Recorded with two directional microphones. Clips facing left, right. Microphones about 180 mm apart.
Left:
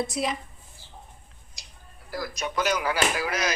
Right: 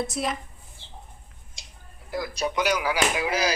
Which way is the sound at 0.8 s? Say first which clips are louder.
Right 2 dB; 25° right (ahead or behind).